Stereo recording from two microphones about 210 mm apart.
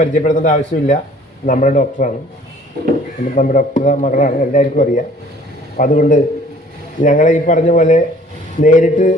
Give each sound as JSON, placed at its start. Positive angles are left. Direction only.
{"t": 0.0, "sound": "a man's voice", "side_deg": 35}
{"t": 3.3, "sound": "a man's voice", "side_deg": 40}